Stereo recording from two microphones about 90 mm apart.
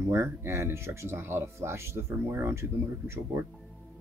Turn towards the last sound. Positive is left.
turn(degrees=-30)  # may be behind; listen again after turning